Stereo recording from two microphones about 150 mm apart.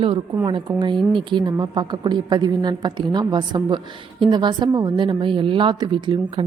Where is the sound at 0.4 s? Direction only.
30° right (ahead or behind).